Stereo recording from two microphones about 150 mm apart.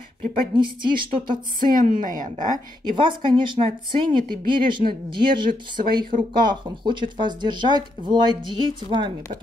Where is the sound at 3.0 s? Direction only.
35° right (ahead or behind).